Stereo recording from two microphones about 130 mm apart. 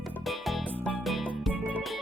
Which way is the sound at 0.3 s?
Centre (ahead or behind).